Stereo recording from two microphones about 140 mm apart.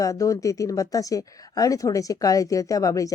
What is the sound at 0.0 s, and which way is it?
Speech, 25° left (ahead or behind).